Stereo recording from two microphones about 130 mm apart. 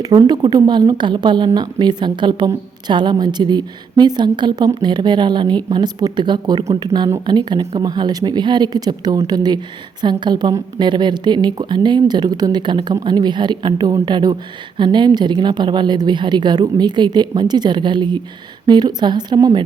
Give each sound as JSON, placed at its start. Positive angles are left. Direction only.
{"t": 0.0, "sound": "a woman's voice", "side_deg": -30}